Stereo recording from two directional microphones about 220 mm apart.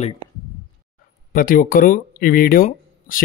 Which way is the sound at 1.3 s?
40° left (ahead or behind).